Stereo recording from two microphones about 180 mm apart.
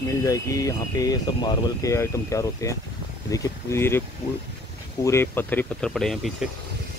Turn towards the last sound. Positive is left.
turn(degrees=0)  # may be behind; listen again after turning